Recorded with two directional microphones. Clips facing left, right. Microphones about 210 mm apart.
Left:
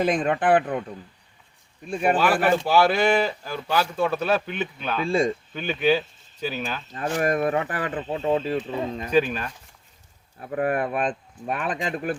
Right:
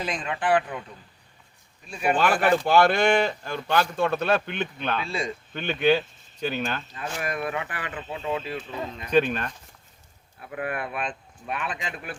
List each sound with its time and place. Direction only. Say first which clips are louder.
0.0 s speech: left 7 dB; 55° left (ahead or behind)
1.9 s speech: left 3 dB; 50° left (ahead or behind)
2.1 s speech: right 1 dB; 5° left (ahead or behind)
5.0 s speech: left 9 dB; 50° left (ahead or behind)
5.5 s speech: right 1 dB; 5° left (ahead or behind)
6.9 s speech: left 8 dB; 45° left (ahead or behind)
8.7 s speech: left 6 dB; 30° left (ahead or behind)
9.0 s speech: right 1 dB; 5° left (ahead or behind)
10.4 s speech: left 7 dB; 40° left (ahead or behind)